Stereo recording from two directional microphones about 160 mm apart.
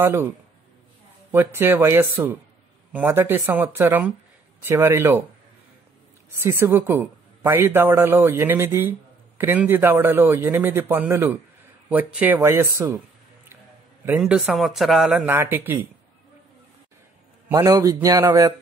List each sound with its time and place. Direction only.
0.0 s a woman's voice: 15° right (ahead or behind)
1.3 s a woman's voice: 15° right (ahead or behind)
6.3 s a woman's voice: 15° right (ahead or behind)
14.0 s a woman's voice: 5° right (ahead or behind)
17.5 s a man's voice: 20° right (ahead or behind)